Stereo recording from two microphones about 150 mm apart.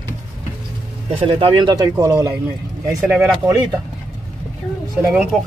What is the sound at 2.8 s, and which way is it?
Speech, 10° right (ahead or behind).